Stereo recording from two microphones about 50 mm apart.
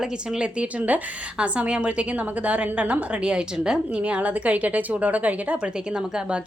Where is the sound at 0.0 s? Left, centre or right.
Centre.